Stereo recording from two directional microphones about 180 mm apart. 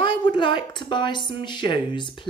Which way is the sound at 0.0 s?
25° left (ahead or behind).